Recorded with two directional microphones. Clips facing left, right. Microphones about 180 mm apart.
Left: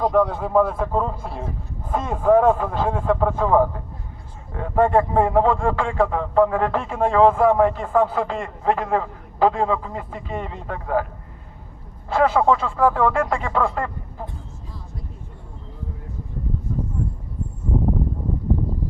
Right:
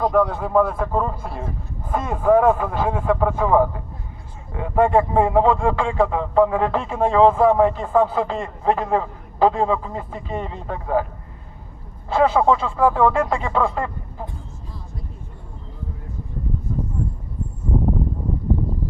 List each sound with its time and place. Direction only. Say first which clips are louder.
0.0 s speech: even; centre (ahead or behind); by 11.0 s 25° right (ahead or behind)
12.0 s speech: right 1 dB; 20° right (ahead or behind)